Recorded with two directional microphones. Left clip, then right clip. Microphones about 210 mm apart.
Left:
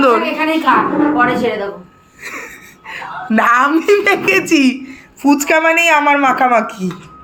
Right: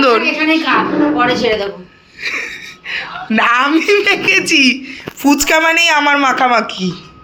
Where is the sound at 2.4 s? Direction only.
5° left (ahead or behind).